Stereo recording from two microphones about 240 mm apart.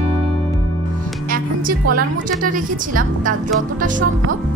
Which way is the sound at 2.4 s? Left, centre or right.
Right.